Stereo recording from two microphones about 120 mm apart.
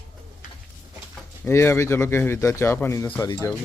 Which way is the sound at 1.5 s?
20° left (ahead or behind).